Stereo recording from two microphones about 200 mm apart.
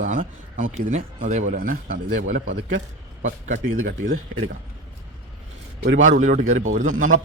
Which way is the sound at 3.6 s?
75° right (ahead or behind).